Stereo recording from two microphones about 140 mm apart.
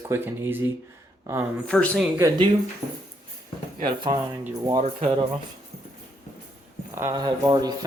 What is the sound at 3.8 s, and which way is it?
Speech, 35° right (ahead or behind).